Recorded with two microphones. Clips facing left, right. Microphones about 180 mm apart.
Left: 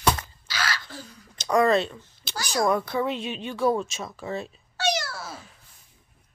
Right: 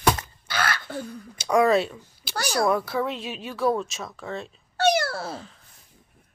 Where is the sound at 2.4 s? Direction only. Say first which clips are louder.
Right 2 dB; 60° right (ahead or behind).